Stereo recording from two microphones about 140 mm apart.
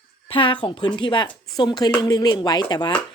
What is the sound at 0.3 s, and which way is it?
A woman's voice, 35° left (ahead or behind).